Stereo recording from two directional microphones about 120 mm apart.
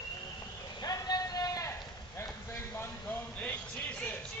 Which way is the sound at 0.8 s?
30° left (ahead or behind).